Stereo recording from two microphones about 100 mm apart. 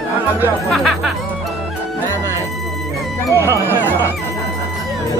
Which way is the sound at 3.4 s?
25° right (ahead or behind).